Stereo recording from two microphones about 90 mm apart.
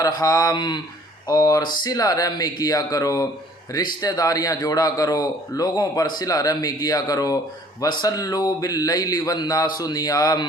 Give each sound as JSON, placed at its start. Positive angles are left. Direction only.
{"t": 0.0, "sound": "a man's voice", "side_deg": 45}